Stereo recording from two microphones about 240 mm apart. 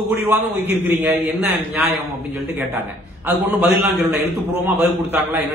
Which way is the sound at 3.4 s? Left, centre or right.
Centre.